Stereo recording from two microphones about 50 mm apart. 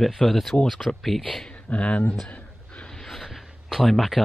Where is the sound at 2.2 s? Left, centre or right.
Left.